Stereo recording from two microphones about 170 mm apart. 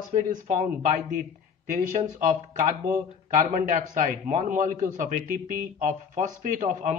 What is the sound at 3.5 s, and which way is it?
Speech, 50° right (ahead or behind).